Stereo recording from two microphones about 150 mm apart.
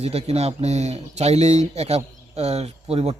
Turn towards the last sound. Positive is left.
turn(degrees=-45)  # may be behind; listen again after turning